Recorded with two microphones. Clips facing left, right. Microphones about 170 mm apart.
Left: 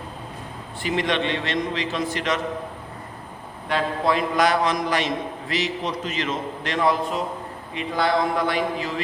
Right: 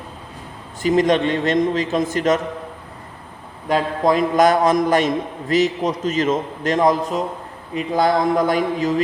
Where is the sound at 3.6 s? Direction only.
45° right (ahead or behind).